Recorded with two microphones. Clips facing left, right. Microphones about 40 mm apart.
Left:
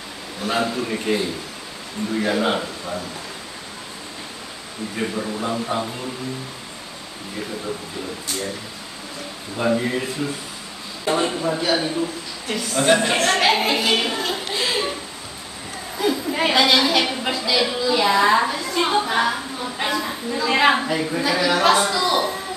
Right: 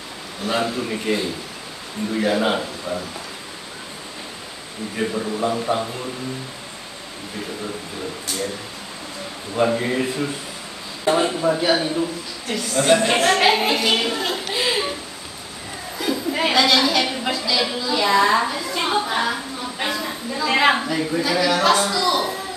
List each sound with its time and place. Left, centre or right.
0.5 s a man's voice: centre
2.2 s a man's voice: centre
4.9 s a man's voice: centre
9.6 s a man's voice: right
11.1 s a man's voice: centre
14.5 s a sound: centre
16.0 s a woman's voice: centre